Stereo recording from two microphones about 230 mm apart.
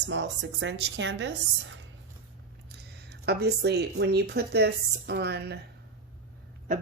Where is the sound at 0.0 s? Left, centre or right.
Right.